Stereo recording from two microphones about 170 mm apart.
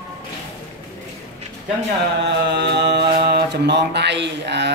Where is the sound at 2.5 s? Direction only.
85° right.